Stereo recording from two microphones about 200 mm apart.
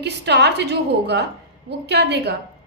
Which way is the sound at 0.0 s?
55° right (ahead or behind).